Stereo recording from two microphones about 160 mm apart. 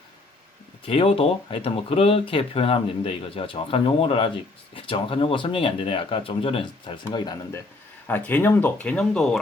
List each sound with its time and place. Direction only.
0.9 s speech: 35° left (ahead or behind)
8.0 s speech: 10° left (ahead or behind)